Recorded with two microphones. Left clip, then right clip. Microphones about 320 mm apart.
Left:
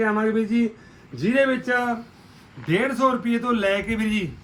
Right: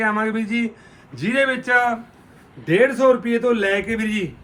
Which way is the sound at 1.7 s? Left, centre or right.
Right.